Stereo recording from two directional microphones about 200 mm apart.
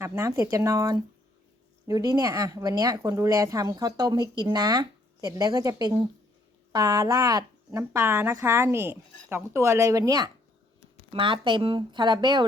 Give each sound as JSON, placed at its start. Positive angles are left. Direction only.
{"t": 0.0, "sound": "speech", "side_deg": -15}